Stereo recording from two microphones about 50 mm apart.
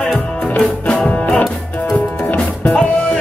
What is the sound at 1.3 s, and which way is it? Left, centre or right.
Music, centre.